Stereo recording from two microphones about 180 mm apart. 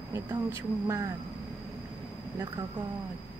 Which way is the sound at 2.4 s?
25° right (ahead or behind).